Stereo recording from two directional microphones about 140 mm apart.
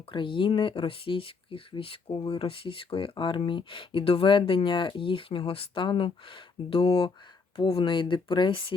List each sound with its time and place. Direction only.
0.1 s speech: 35° left (ahead or behind)